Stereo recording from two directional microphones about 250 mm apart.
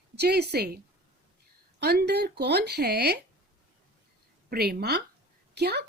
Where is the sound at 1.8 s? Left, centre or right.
Right.